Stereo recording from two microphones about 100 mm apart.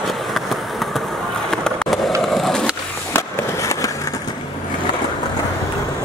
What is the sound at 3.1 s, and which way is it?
Skateboard, 25° left (ahead or behind).